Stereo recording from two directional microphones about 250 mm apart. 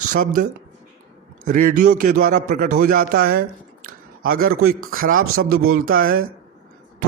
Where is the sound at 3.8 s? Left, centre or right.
Right.